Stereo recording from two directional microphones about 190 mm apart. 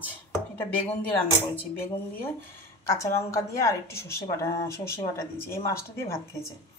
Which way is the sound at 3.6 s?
15° left (ahead or behind).